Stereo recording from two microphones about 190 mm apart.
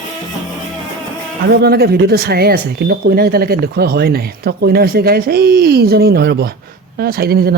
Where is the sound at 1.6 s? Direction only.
55° right (ahead or behind).